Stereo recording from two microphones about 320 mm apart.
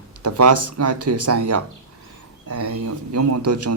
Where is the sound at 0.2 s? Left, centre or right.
Right.